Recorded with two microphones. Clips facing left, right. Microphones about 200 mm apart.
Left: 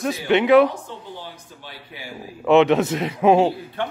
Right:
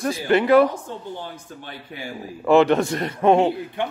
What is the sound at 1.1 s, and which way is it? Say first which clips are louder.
Speech: right 3 dB; 50° right (ahead or behind).